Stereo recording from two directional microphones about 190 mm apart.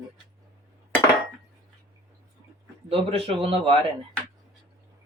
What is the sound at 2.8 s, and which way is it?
Speech, 30° right (ahead or behind).